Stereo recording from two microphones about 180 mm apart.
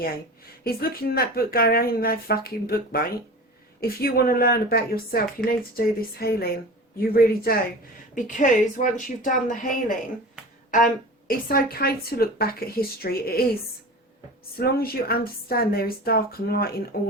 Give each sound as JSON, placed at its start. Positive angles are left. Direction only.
{"t": 0.6, "sound": "a woman's voice", "side_deg": 55}
{"t": 8.1, "sound": "a woman's voice", "side_deg": 45}
{"t": 11.3, "sound": "a woman's voice", "side_deg": 55}
{"t": 14.6, "sound": "a woman's voice", "side_deg": 55}